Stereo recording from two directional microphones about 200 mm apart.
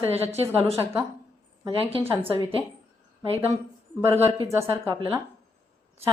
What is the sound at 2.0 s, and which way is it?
Speech, 10° right (ahead or behind).